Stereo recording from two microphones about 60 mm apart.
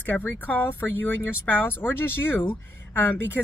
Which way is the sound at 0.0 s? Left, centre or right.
Left.